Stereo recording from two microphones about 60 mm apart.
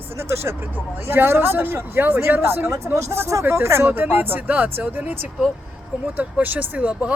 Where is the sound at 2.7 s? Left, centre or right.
Right.